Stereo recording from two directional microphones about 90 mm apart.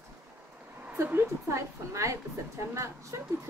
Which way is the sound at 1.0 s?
30° right (ahead or behind).